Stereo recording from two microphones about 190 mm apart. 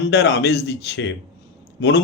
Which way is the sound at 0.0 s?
65° left (ahead or behind).